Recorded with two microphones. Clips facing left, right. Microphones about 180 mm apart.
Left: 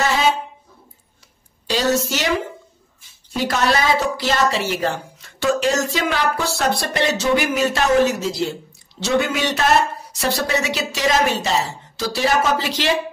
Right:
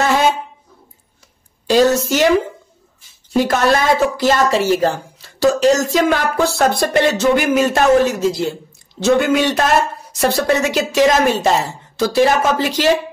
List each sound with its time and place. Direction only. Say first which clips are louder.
1.7 s a woman's voice: right 7 dB; 50° right (ahead or behind)
3.3 s a woman's voice: right 5 dB; 50° right (ahead or behind)